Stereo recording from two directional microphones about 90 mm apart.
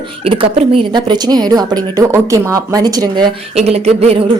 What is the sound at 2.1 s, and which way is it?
A woman's voice, 35° right (ahead or behind).